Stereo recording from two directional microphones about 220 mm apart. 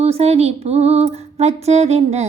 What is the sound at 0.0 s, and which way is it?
Female singing, 30° right (ahead or behind).